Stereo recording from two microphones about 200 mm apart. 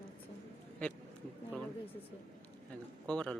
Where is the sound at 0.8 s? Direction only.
5° left (ahead or behind).